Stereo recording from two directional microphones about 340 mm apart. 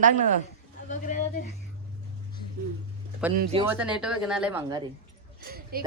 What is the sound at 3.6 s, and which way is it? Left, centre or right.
Speech, centre.